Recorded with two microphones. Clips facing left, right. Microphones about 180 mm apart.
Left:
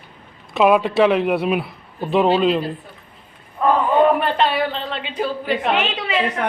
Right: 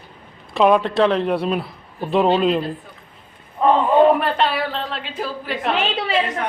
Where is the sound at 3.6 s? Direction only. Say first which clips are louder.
Right 1 dB; 20° right (ahead or behind).